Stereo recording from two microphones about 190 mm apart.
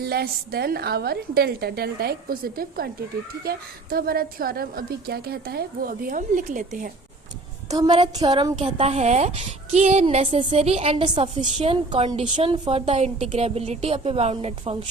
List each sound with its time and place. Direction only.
0.0 s a woman's voice: 55° right (ahead or behind)
7.7 s a woman's voice: 20° right (ahead or behind)